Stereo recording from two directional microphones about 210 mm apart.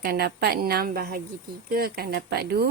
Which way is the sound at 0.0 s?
50° right (ahead or behind).